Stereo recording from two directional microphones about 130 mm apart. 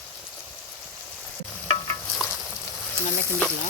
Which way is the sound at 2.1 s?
5° right (ahead or behind).